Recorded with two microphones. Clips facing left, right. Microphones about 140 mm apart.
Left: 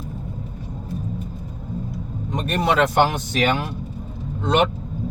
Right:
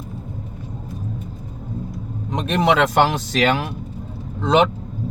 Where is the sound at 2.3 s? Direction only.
85° right.